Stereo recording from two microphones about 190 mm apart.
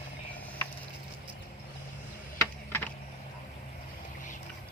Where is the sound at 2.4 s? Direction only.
10° left (ahead or behind).